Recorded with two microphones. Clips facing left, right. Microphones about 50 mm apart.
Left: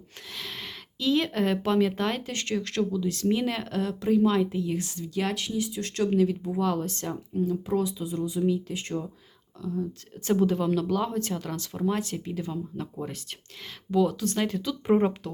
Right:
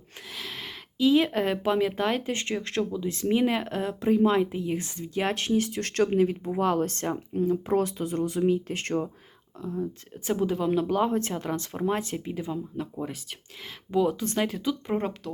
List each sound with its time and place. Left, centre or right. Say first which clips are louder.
0.3 s speech: even; centre
2.3 s speech: even; right
5.3 s speech: right 4 dB; right
6.1 s speech: even; right
8.4 s speech: right 2 dB; right
8.8 s speech: right 4 dB; right
9.6 s speech: even; right
10.2 s speech: left 2 dB; centre
10.7 s speech: right 2 dB; right; by 13.1 s centre
13.9 s speech: left 1 dB; centre
14.3 s speech: right 1 dB; centre
14.8 s speech: left 6 dB; centre